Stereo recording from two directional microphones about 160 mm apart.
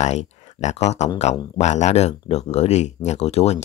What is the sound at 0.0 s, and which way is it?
Speech, 45° left (ahead or behind).